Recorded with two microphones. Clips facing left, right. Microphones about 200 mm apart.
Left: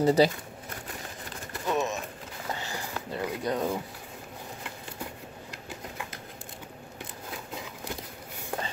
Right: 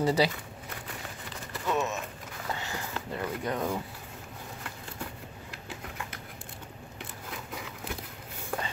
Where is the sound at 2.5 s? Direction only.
35° left (ahead or behind).